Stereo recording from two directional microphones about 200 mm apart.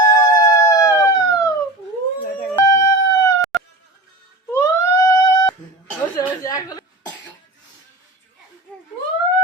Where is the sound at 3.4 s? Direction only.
Centre (ahead or behind).